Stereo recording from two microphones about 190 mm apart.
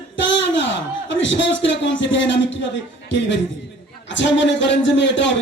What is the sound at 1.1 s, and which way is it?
A man's voice, 75° left (ahead or behind).